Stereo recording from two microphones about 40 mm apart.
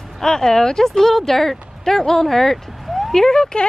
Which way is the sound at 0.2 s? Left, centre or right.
Centre.